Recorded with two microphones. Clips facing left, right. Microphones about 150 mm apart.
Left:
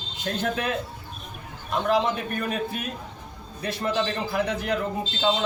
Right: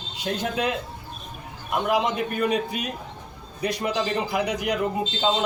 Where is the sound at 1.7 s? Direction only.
15° right (ahead or behind).